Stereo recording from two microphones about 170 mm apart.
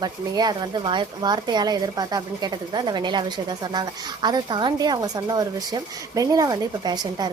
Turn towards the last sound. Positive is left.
turn(degrees=-25)  # may be behind; listen again after turning